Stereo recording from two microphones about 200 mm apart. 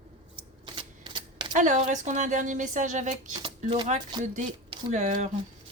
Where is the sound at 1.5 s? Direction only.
40° right (ahead or behind).